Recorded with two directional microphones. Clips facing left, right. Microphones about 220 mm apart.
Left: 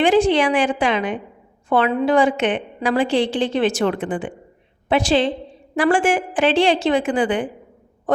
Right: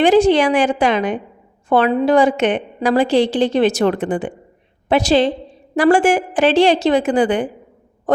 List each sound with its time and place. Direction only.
0.0 s a woman's voice: 40° right (ahead or behind)